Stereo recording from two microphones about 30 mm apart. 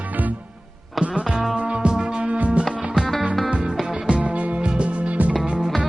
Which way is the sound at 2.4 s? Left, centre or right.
Right.